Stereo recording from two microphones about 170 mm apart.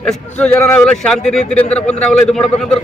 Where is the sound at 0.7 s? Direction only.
5° left (ahead or behind).